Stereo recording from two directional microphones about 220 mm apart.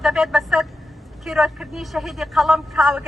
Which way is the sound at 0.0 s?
Centre (ahead or behind).